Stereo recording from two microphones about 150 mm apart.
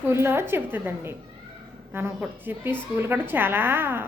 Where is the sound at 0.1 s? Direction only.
15° right (ahead or behind).